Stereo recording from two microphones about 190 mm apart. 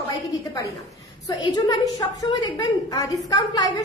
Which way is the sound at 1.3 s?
20° left (ahead or behind).